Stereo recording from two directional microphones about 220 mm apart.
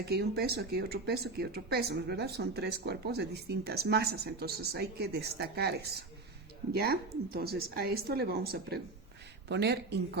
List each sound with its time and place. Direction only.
0.0 s speech: 45° right (ahead or behind)